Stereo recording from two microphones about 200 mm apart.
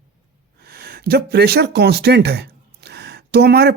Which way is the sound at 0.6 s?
50° right (ahead or behind).